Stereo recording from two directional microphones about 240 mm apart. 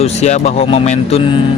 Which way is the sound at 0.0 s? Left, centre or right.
Left.